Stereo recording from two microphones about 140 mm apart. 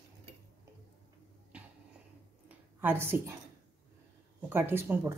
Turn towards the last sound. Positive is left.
turn(degrees=-15)  # may be behind; listen again after turning